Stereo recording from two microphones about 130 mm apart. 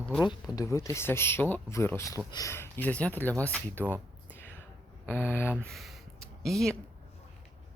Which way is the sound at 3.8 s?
15° right (ahead or behind).